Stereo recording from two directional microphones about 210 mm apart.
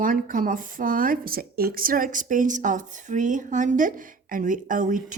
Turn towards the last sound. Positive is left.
turn(degrees=-40)  # may be behind; listen again after turning